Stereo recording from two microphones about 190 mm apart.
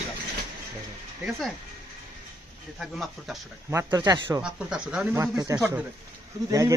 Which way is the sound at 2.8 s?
Centre (ahead or behind).